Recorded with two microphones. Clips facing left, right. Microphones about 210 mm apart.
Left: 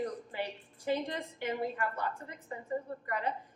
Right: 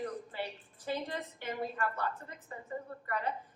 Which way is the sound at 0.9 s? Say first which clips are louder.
Left 4 dB; 15° left (ahead or behind).